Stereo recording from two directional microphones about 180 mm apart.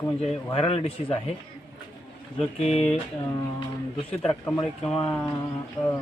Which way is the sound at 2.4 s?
35° left (ahead or behind).